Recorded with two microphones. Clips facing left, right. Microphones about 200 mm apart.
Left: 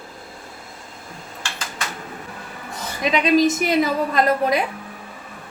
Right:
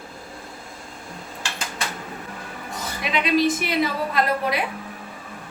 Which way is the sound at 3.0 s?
45° left (ahead or behind).